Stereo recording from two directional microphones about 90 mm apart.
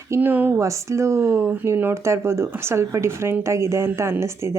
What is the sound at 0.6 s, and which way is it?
A woman's voice, 35° right (ahead or behind).